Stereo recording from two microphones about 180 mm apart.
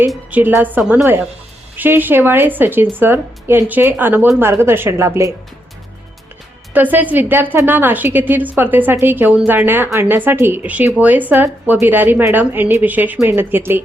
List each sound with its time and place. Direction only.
0.1 s speech: 10° right (ahead or behind)
6.7 s speech: 10° right (ahead or behind)